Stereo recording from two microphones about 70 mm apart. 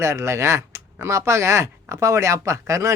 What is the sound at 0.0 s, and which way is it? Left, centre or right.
A man's voice, right.